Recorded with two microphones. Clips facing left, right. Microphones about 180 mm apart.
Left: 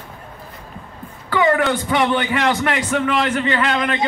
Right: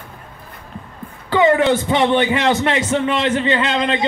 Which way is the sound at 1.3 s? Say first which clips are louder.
Right 3 dB; 20° right (ahead or behind).